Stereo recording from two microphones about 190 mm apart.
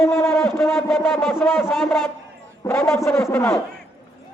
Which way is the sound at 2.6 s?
15° left (ahead or behind).